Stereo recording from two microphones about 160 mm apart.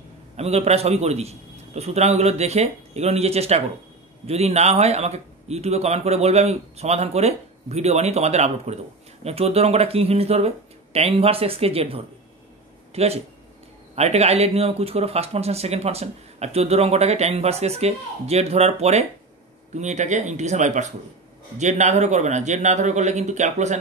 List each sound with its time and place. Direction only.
0.4 s a man's voice: 40° right (ahead or behind)